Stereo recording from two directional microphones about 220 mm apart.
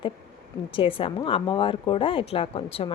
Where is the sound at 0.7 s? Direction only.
25° left (ahead or behind).